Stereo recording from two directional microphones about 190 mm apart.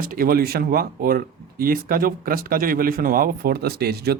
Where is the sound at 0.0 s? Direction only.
50° right (ahead or behind).